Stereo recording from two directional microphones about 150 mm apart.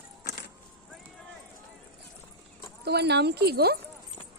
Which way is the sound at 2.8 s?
90° right.